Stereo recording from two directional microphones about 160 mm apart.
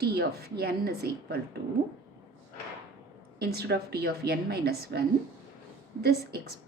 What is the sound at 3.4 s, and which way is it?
A woman's voice, 90° right.